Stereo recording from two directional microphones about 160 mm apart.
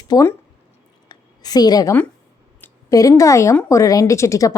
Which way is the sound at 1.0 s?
25° left (ahead or behind).